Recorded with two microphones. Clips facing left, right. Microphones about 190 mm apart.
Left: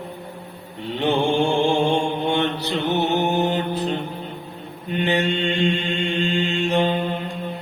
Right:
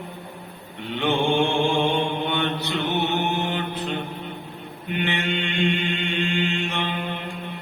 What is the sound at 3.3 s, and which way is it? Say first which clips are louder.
Mantra: left 5 dB; 40° left (ahead or behind).